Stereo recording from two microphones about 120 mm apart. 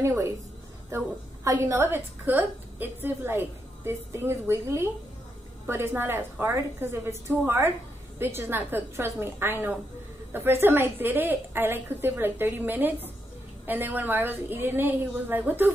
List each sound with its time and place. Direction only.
0.0 s a woman's voice: 25° right (ahead or behind)